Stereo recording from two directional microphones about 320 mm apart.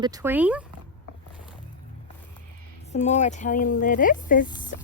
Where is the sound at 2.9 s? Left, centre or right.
Left.